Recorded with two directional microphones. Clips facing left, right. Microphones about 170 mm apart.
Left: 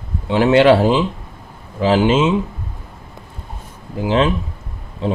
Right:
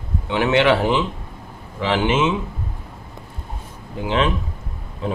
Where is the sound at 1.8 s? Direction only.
30° left (ahead or behind).